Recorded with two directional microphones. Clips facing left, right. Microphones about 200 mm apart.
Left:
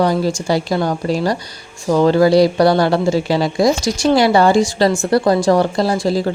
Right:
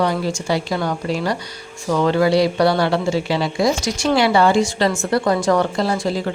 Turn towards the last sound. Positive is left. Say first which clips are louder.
# left 4 dB
turn(degrees=35)  # may be behind; listen again after turning